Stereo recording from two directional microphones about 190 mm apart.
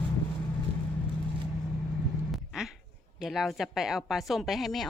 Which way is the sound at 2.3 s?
Centre (ahead or behind).